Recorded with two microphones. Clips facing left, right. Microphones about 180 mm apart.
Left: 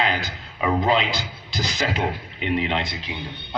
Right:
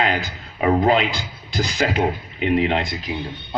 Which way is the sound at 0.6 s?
40° right (ahead or behind).